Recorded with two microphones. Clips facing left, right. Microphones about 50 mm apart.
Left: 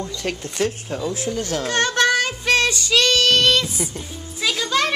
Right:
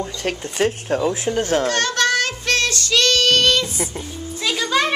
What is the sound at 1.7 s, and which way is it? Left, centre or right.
Child singing, left.